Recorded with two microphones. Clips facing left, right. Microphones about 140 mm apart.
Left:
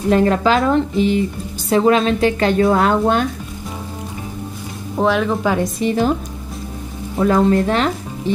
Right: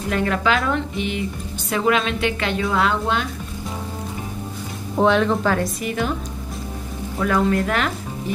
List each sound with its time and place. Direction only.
0.1 s a woman's voice: 35° left (ahead or behind)
4.9 s speech: 5° left (ahead or behind)
5.8 s a woman's voice: 30° left (ahead or behind)
7.2 s speech: 30° left (ahead or behind)